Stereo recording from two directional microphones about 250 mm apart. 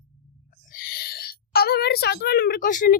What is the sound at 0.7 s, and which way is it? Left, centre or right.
A woman's voice, left.